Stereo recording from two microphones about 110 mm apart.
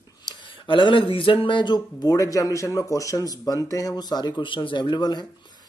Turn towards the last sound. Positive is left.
turn(degrees=40)  # may be behind; listen again after turning